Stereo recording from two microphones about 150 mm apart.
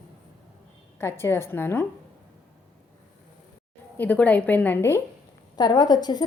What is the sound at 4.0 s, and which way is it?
A woman's voice, 10° left (ahead or behind).